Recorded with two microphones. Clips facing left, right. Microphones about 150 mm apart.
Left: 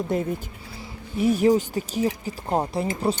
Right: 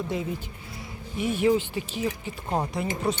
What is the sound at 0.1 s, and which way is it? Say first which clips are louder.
Speech: left 5 dB; 50° left (ahead or behind).